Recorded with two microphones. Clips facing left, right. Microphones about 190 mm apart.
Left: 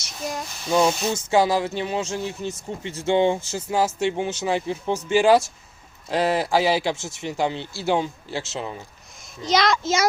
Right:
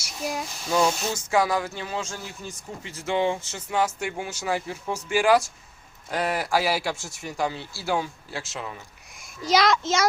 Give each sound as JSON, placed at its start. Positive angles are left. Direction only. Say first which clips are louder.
{"t": 0.2, "sound": "child singing", "louder": "even", "side_deg": -5}
{"t": 1.0, "sound": "speech", "louder": "left 4 dB", "side_deg": 25}
{"t": 9.4, "sound": "a child's voice", "louder": "even", "side_deg": -5}